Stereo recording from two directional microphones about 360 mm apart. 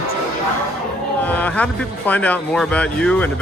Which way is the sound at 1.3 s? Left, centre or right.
Centre.